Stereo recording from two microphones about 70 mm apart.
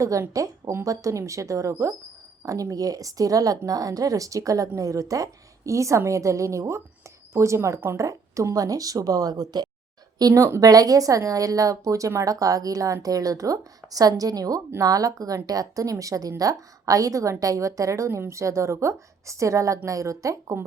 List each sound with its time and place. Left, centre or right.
0.0 s a woman's voice: right
10.2 s a woman's voice: right